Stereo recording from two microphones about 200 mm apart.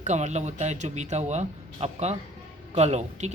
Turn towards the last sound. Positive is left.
turn(degrees=-35)  # may be behind; listen again after turning